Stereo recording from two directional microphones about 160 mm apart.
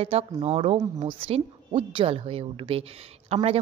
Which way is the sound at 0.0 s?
40° right (ahead or behind).